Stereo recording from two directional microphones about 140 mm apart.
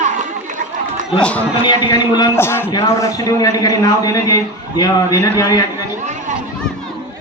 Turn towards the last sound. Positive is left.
turn(degrees=25)  # may be behind; listen again after turning